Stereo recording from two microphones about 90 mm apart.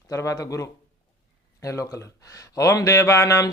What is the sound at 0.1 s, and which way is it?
Speech, 35° left (ahead or behind).